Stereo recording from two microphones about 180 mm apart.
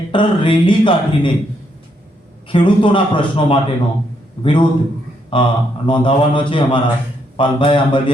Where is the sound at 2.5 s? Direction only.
30° left (ahead or behind).